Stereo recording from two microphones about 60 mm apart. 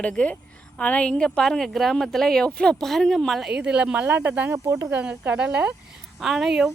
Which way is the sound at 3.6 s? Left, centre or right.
Centre.